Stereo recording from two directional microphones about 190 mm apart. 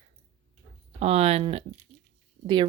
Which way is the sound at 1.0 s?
30° right (ahead or behind).